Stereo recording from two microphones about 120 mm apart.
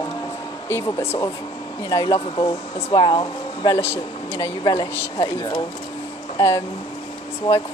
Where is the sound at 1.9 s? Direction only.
35° left (ahead or behind).